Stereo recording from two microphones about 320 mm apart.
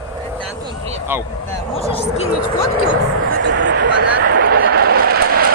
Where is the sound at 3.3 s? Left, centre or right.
Right.